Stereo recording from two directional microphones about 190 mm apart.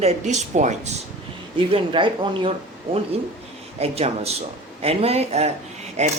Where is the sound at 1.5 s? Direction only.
25° right (ahead or behind).